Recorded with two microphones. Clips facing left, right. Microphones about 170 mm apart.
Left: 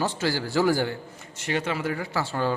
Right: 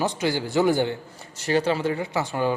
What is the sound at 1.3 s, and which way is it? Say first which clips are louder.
Speech: right 5 dB; 35° right (ahead or behind).